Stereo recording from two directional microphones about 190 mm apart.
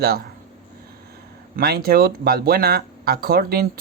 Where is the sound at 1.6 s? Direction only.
55° right (ahead or behind).